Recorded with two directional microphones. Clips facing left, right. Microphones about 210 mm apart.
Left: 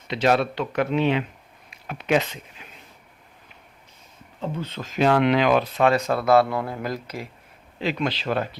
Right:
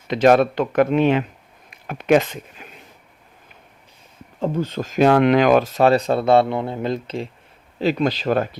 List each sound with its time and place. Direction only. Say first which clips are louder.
0.1 s speech: right 6 dB; 50° right (ahead or behind)
4.4 s speech: right 8 dB; 45° right (ahead or behind); by 7.3 s 25° right (ahead or behind)
7.8 s speech: right 6 dB; 40° right (ahead or behind)